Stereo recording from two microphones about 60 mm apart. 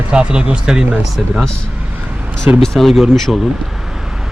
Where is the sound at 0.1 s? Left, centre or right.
Centre.